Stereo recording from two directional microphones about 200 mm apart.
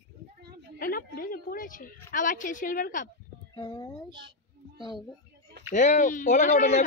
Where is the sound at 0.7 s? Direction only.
45° left (ahead or behind).